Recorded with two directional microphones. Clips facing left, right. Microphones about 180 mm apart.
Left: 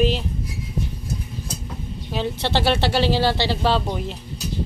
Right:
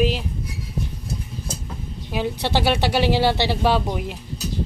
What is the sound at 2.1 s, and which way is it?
A woman's voice, 10° right (ahead or behind).